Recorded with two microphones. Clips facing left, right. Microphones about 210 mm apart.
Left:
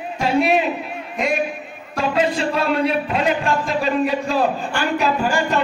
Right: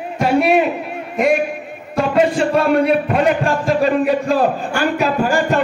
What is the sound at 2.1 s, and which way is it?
A man's voice, 55° right (ahead or behind).